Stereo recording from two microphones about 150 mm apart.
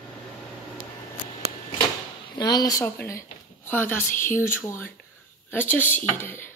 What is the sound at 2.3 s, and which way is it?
Speech, 25° left (ahead or behind).